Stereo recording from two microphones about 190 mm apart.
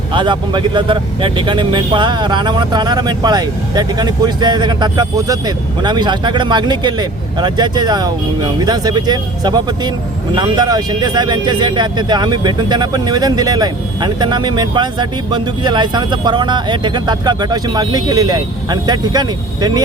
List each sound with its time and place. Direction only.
0.1 s speech: 25° right (ahead or behind)